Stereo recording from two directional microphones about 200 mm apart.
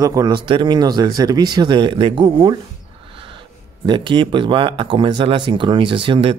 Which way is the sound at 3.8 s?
25° right (ahead or behind).